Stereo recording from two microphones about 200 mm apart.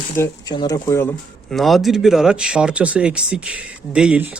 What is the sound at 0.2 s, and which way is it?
Speech, 20° left (ahead or behind).